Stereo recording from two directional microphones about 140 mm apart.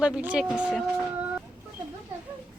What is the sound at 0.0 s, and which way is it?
Speech, 10° right (ahead or behind).